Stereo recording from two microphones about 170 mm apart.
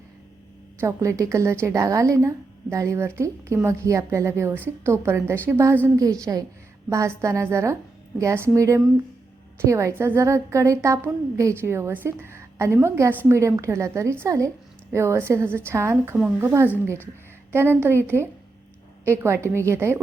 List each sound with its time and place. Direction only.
0.8 s a woman's voice: 15° right (ahead or behind)